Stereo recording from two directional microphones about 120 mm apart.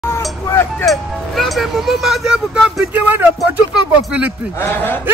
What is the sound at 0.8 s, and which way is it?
Speech, centre (ahead or behind).